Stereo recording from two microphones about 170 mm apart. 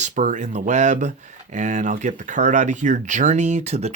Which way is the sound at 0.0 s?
45° right (ahead or behind).